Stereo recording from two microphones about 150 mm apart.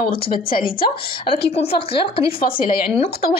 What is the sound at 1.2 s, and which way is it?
A woman's voice, 40° left (ahead or behind).